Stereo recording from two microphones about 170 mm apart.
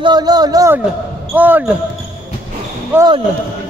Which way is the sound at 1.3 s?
10° right (ahead or behind).